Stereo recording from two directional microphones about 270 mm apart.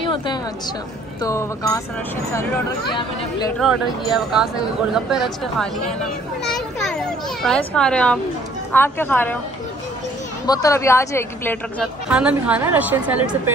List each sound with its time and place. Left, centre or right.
0.0 s a sound: centre
1.2 s speech: centre
4.1 s a woman's voice: centre
6.4 s children playing: centre
8.7 s speech: centre
10.4 s speech: centre
12.1 s a woman's voice: centre